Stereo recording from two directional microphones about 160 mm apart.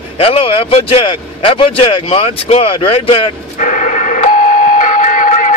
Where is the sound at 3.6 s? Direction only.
50° left (ahead or behind).